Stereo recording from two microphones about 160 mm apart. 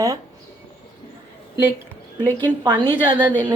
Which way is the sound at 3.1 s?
30° right (ahead or behind).